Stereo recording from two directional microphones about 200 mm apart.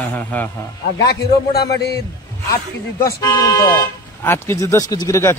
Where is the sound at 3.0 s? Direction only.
15° left (ahead or behind).